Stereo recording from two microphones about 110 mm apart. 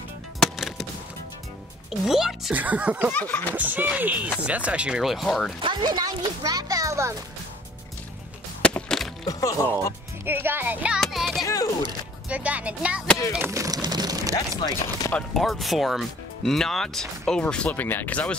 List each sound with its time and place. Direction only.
0.4 s music: centre (ahead or behind)
1.9 s speech: 5° right (ahead or behind)
2.5 s speech: 15° right (ahead or behind)
3.1 s snicker: 15° left (ahead or behind)
3.5 s speech: 15° right (ahead or behind); by 5.5 s centre (ahead or behind)
5.6 s a child's voice: 45° right (ahead or behind); by 7.2 s 25° right (ahead or behind)
8.6 s music: 10° left (ahead or behind)
9.2 s speech: 30° left (ahead or behind)
10.2 s speech: 20° right (ahead or behind)
11.0 s music: centre (ahead or behind)
11.4 s speech: 30° left (ahead or behind)
12.3 s speech: 15° right (ahead or behind)
13.5 s a child's voice: 30° right (ahead or behind)
15.1 s speech: 5° left (ahead or behind)